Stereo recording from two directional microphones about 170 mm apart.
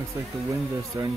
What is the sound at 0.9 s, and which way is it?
Speech, 20° right (ahead or behind).